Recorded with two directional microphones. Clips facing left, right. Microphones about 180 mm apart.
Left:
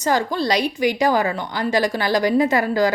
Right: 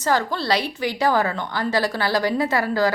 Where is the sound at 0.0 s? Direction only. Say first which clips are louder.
Left 2 dB; 15° left (ahead or behind).